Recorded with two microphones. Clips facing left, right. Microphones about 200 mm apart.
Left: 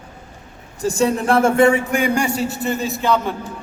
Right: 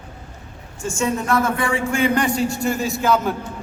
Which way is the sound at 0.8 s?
35° left (ahead or behind).